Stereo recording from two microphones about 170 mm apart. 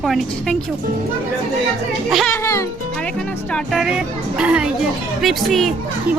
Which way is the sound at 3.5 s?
5° right (ahead or behind).